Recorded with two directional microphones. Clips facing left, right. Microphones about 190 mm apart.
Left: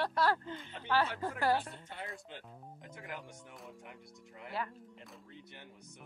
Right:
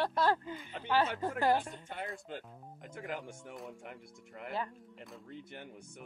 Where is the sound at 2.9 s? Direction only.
50° right (ahead or behind).